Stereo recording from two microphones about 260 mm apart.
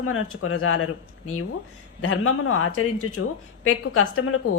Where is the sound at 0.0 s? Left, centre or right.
Left.